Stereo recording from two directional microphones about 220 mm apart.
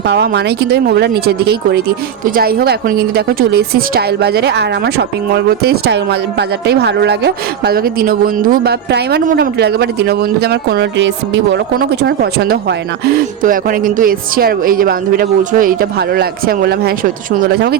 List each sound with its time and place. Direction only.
0.1 s a woman's voice: 50° right (ahead or behind)